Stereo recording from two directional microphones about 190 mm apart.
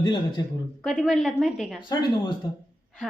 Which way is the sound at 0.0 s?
25° left (ahead or behind).